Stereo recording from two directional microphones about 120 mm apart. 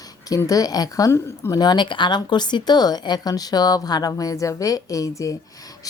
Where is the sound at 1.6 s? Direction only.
40° left (ahead or behind).